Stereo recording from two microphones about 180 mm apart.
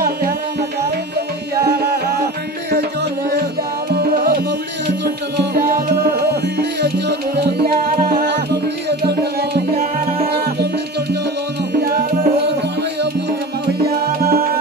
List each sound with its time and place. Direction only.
5.0 s music: 70° right (ahead or behind)
7.8 s music: 50° right (ahead or behind)
8.8 s music: 65° right (ahead or behind)
11.8 s music: 55° right (ahead or behind)
13.7 s music: 60° right (ahead or behind)